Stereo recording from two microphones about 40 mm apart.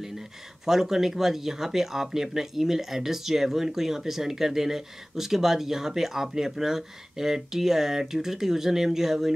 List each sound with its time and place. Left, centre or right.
0.7 s speech: centre